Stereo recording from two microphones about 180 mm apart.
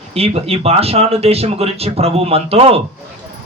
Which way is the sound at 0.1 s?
35° right (ahead or behind).